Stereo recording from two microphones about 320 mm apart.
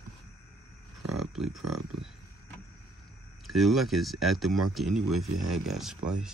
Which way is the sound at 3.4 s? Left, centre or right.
Centre.